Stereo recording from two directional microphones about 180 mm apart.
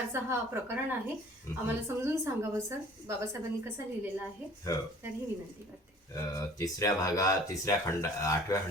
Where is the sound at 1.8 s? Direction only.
15° right (ahead or behind).